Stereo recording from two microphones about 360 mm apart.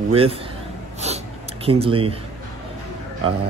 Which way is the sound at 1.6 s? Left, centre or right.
Centre.